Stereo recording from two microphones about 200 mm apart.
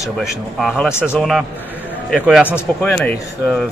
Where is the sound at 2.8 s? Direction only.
10° left (ahead or behind).